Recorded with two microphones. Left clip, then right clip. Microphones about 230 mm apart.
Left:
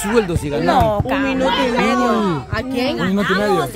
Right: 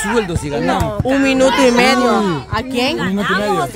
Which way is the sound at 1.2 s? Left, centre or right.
Right.